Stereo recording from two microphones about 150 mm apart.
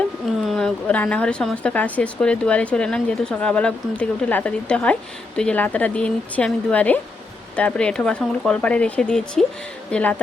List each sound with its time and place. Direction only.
0.4 s a woman's voice: 5° left (ahead or behind)